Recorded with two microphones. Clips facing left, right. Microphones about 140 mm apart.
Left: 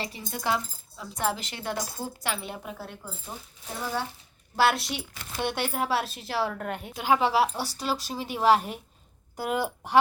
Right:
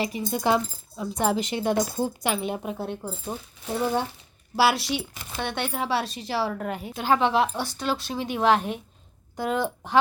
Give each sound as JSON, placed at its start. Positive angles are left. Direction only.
{"t": 0.0, "sound": "speech", "side_deg": -15}
{"t": 4.5, "sound": "a woman's voice", "side_deg": -5}